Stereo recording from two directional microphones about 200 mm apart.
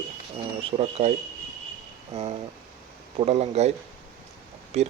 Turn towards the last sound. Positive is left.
turn(degrees=-30)  # may be behind; listen again after turning